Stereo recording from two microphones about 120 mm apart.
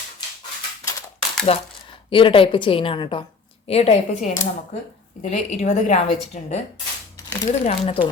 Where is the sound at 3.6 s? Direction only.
60° left (ahead or behind).